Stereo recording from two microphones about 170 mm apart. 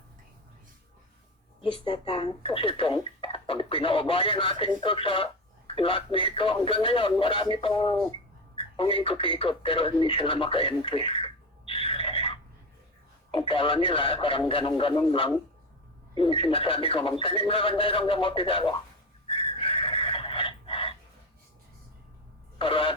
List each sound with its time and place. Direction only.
1.6 s speech: 30° left (ahead or behind)
19.5 s a sound: 35° left (ahead or behind)
22.5 s speech: 30° left (ahead or behind)